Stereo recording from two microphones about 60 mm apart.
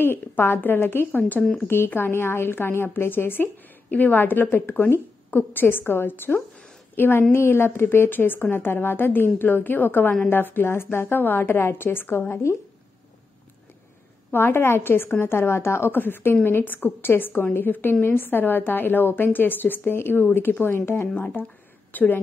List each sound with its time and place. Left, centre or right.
0.0 s a woman's voice: left
14.3 s a woman's voice: left
21.2 s a woman's voice: left